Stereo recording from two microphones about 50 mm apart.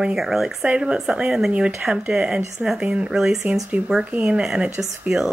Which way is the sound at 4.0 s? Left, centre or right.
Right.